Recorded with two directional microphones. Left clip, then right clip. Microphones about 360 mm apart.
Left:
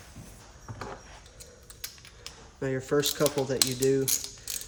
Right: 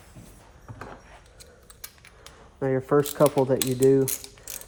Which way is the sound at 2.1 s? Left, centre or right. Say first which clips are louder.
Right 2 dB; centre.